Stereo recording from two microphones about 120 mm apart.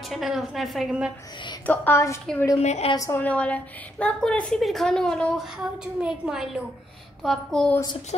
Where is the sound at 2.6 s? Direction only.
65° left (ahead or behind).